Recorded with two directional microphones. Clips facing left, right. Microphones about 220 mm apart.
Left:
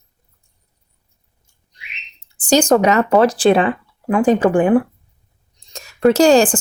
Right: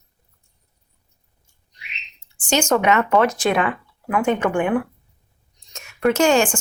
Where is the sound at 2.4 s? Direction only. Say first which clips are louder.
Left 6 dB; 35° left (ahead or behind).